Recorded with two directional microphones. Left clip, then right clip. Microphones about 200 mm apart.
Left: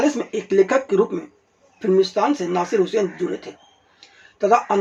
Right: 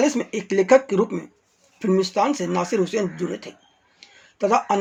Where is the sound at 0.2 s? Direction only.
30° right (ahead or behind).